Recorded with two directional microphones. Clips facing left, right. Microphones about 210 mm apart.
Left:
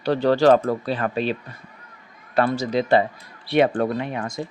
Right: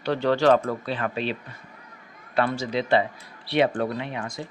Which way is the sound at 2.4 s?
40° left (ahead or behind).